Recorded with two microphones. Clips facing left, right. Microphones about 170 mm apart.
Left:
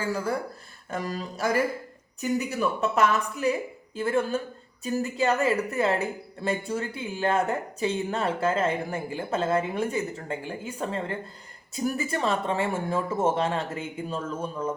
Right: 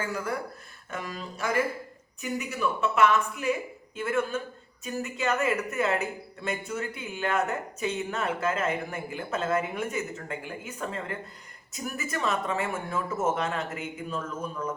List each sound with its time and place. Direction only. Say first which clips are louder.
0.0 s speech: left 3 dB; 30° left (ahead or behind)